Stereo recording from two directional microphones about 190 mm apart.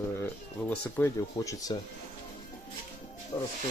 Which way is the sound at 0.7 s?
10° left (ahead or behind).